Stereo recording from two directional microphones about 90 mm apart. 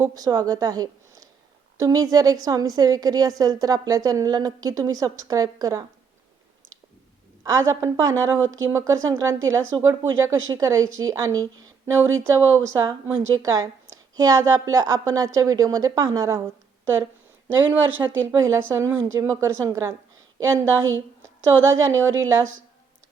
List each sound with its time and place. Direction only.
0.0 s a woman's voice: 45° right (ahead or behind)
7.4 s a woman's voice: 40° right (ahead or behind)
17.9 s a woman's voice: 25° right (ahead or behind); by 22.4 s 40° right (ahead or behind)